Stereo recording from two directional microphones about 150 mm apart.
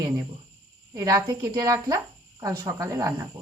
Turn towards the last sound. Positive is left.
turn(degrees=-20)  # may be behind; listen again after turning